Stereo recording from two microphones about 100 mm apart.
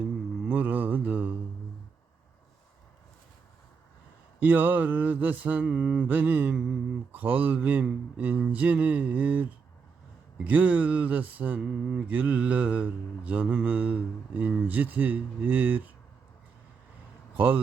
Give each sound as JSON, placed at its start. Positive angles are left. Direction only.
{"t": 0.4, "sound": "a sound", "side_deg": -15}
{"t": 4.4, "sound": "speech", "side_deg": -15}
{"t": 17.3, "sound": "a man's voice", "side_deg": -15}